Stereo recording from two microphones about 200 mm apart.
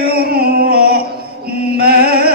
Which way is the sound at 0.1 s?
50° right (ahead or behind).